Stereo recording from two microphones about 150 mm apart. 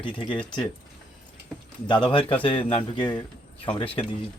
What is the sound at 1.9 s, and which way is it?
A man's voice, 35° left (ahead or behind).